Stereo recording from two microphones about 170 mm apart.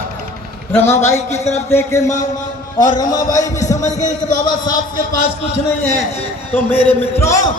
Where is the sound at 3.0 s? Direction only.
20° left (ahead or behind).